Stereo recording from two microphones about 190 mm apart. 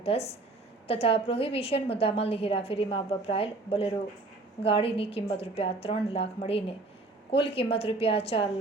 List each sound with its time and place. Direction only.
0.0 s a woman's voice: 30° left (ahead or behind)